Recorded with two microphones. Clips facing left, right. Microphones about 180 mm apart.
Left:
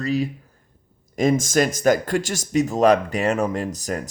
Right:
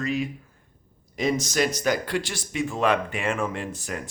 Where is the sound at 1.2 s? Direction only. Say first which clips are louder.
Left 5 dB; 45° left (ahead or behind).